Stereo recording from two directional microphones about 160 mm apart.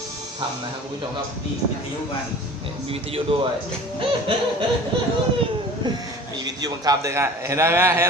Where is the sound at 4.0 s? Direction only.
35° right (ahead or behind).